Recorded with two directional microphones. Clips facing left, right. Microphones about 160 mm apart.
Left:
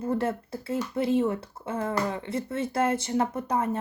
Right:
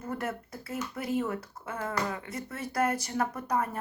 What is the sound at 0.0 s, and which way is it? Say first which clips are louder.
Speech: left 7 dB; 30° left (ahead or behind).